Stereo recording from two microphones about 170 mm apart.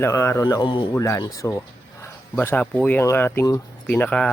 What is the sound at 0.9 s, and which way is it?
Speech, 15° left (ahead or behind).